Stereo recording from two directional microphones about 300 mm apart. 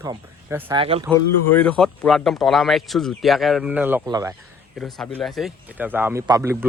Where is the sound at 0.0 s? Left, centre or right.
Centre.